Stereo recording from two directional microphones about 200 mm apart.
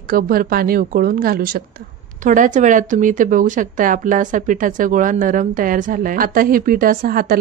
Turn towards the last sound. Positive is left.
turn(degrees=-50)  # may be behind; listen again after turning